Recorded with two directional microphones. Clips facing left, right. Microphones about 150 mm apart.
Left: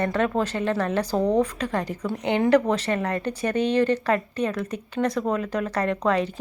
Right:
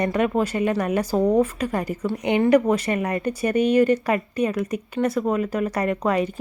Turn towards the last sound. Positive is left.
turn(degrees=-10)  # may be behind; listen again after turning